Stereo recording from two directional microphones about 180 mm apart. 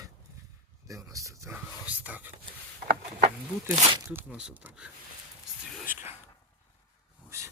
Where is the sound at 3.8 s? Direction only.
30° right (ahead or behind).